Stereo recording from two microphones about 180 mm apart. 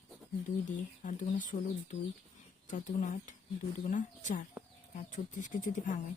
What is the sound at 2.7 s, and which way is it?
Speech, 45° left (ahead or behind).